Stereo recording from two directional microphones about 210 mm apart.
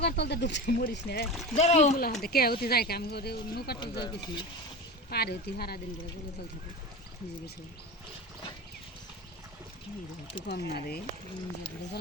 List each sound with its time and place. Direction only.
0.0 s speech: 55° left (ahead or behind)
1.5 s speech: 35° left (ahead or behind); by 3.8 s 50° left (ahead or behind)
3.8 s speech: 20° left (ahead or behind)
5.0 s speech: 50° left (ahead or behind)
10.4 s speech: 50° left (ahead or behind)